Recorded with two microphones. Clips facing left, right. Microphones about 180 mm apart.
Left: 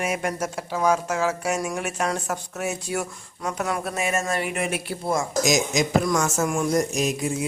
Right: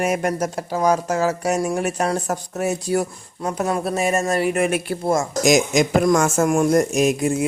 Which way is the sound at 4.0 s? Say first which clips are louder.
Right 6 dB; 40° right (ahead or behind).